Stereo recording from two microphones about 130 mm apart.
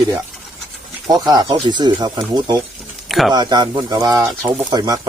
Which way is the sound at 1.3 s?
35° right (ahead or behind).